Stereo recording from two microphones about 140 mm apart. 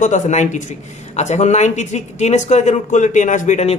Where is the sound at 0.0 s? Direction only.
60° left (ahead or behind).